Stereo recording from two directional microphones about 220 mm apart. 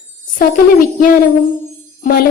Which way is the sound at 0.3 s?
40° left (ahead or behind).